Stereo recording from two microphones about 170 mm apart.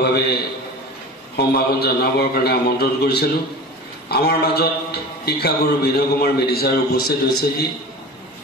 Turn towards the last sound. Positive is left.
turn(degrees=65)  # may be behind; listen again after turning